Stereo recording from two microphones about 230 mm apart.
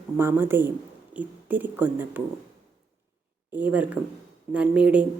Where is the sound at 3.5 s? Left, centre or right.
Centre.